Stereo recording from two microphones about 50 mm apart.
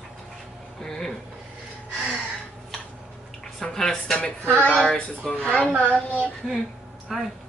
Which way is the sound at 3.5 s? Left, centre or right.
Centre.